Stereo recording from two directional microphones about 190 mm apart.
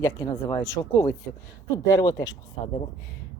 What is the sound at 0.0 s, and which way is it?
Speech, 15° left (ahead or behind).